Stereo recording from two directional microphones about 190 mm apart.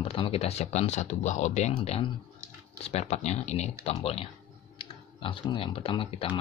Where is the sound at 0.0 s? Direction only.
30° left (ahead or behind).